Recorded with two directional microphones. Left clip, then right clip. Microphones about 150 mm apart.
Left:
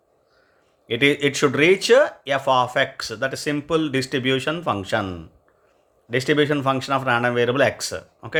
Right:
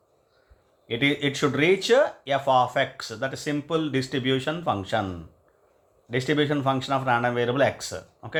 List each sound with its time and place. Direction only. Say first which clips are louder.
0.9 s speech: left 6 dB; 40° left (ahead or behind)